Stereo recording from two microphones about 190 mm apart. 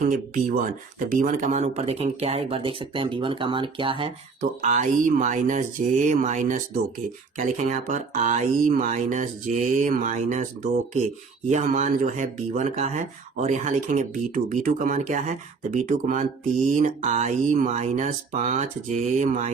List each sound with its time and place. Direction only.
0.1 s speech: 45° right (ahead or behind); by 4.1 s 25° right (ahead or behind)
4.4 s speech: 40° right (ahead or behind)
11.4 s speech: 40° right (ahead or behind)